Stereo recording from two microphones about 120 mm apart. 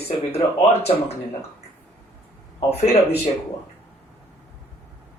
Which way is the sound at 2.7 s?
55° left (ahead or behind).